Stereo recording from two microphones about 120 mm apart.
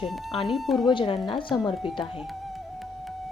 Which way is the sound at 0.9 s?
40° left (ahead or behind).